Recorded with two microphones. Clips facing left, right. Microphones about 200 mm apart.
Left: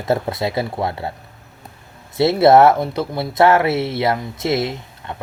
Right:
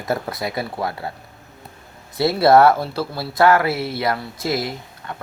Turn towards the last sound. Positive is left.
turn(degrees=25)  # may be behind; listen again after turning